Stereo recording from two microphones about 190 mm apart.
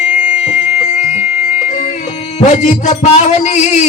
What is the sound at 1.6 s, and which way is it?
Speech, 40° left (ahead or behind).